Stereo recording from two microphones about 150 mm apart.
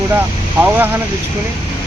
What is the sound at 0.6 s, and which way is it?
Speech, 15° right (ahead or behind).